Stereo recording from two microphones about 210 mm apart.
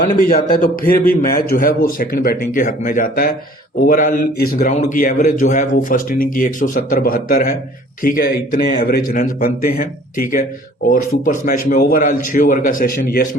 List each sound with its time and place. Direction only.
0.0 s a man's voice: 45° left (ahead or behind)